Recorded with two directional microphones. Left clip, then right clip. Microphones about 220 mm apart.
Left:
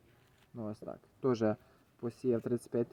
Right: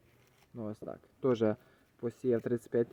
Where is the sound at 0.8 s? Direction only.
5° right (ahead or behind).